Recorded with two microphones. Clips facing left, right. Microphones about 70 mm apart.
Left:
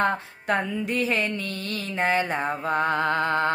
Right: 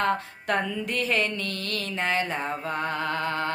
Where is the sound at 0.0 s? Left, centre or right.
Centre.